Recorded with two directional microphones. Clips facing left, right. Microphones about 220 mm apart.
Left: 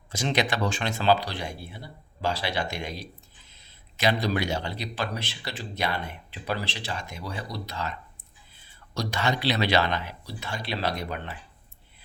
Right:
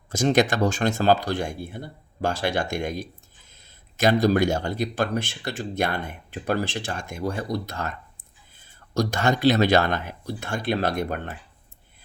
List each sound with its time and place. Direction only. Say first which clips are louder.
0.1 s speech: right 7 dB; 45° right (ahead or behind)